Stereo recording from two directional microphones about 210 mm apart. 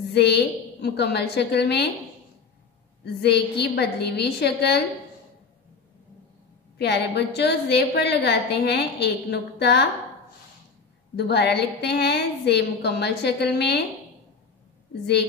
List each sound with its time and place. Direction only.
0.1 s a woman's voice: 55° left (ahead or behind)
3.2 s a woman's voice: 50° left (ahead or behind)
6.8 s a woman's voice: 50° left (ahead or behind)
11.1 s a woman's voice: 50° left (ahead or behind)